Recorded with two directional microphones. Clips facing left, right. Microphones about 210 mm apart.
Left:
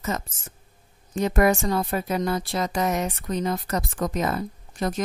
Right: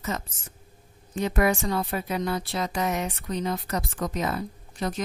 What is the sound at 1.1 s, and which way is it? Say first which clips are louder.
A woman's voice: left 3 dB; 45° left (ahead or behind).